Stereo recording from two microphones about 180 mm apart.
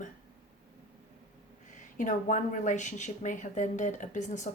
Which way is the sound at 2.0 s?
45° left (ahead or behind).